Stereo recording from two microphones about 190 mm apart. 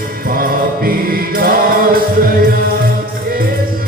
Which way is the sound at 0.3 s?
50° right (ahead or behind).